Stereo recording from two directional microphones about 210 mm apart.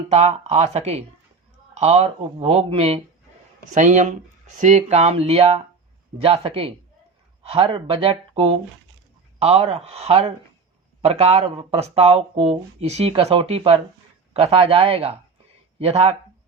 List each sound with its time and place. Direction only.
0.1 s speech: 30° right (ahead or behind)